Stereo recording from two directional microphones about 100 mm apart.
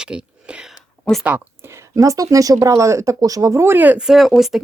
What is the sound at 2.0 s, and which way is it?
Speech, 35° right (ahead or behind).